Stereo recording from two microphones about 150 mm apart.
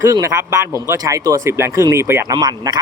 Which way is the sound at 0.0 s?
20° right (ahead or behind).